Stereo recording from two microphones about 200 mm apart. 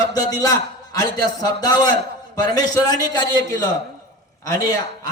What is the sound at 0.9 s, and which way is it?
A man's voice, 20° left (ahead or behind).